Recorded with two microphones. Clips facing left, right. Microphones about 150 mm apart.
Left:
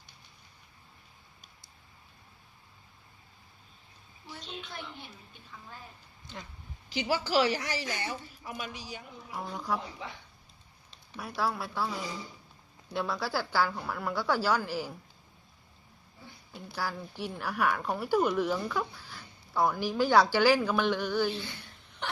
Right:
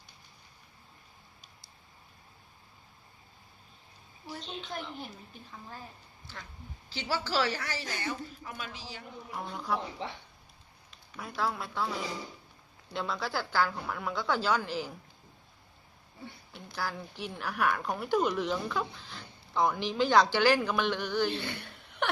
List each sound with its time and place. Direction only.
4.3 s a sound: 45° right (ahead or behind)
6.2 s speech: 20° left (ahead or behind)
11.3 s speech: 10° left (ahead or behind)
12.9 s speech: 10° left (ahead or behind)
16.8 s speech: 10° left (ahead or behind)
21.3 s chuckle: 65° right (ahead or behind)